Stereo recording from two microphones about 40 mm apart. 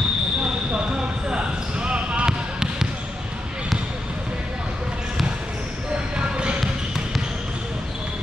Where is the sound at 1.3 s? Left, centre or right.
Right.